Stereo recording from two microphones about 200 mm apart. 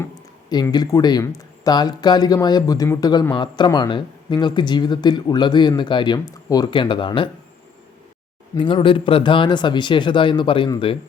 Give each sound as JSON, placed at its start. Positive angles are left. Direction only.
{"t": 0.5, "sound": "speech", "side_deg": 20}
{"t": 8.5, "sound": "speech", "side_deg": 25}